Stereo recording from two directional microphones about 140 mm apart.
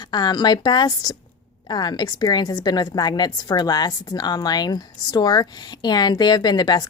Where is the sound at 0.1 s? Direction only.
30° left (ahead or behind).